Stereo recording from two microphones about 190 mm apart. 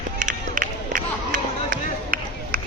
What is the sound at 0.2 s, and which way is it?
Run, 45° right (ahead or behind).